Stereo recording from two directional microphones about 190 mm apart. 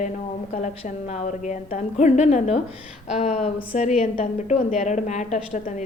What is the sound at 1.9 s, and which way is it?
Speech, 35° left (ahead or behind).